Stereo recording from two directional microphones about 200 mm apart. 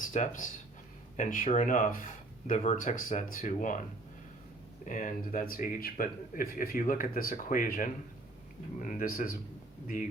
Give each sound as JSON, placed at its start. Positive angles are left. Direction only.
{"t": 0.0, "sound": "speech", "side_deg": 40}
{"t": 4.9, "sound": "speech", "side_deg": 40}